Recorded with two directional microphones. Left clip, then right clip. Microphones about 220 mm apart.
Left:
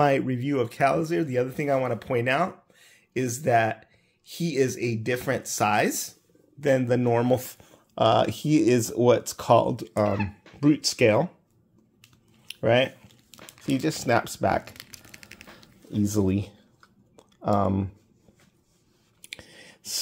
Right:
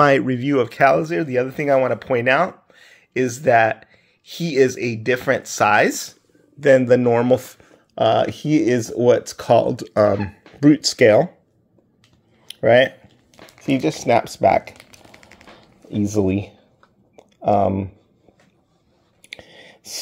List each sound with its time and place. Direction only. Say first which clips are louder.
0.0 s speech: right 8 dB; 10° right (ahead or behind)
12.4 s a sound: right 8 dB; 5° right (ahead or behind)
13.7 s speech: right 7 dB; centre (ahead or behind)
15.0 s a sound: right 1 dB; 65° left (ahead or behind)
15.9 s speech: right 6 dB; 5° left (ahead or behind)
17.2 s typing: right 8 dB; centre (ahead or behind)
19.2 s clicking: right 4 dB; 5° left (ahead or behind)